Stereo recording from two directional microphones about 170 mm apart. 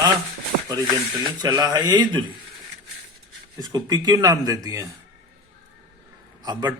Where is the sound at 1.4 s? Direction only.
25° right (ahead or behind).